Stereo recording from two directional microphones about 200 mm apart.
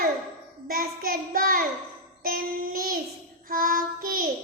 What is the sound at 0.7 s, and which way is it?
Child singing, 45° right (ahead or behind).